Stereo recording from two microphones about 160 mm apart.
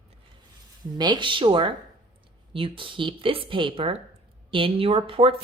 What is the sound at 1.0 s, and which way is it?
A woman's voice, 30° right (ahead or behind).